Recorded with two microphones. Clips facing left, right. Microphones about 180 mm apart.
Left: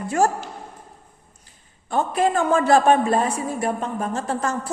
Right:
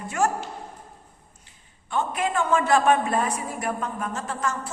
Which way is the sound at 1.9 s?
35° left (ahead or behind).